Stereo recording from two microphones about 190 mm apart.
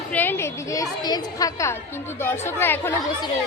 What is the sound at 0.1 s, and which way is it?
A woman's voice, 10° left (ahead or behind).